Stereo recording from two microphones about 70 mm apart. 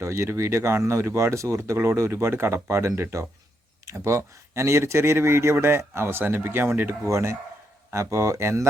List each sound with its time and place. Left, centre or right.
0.0 s speech: right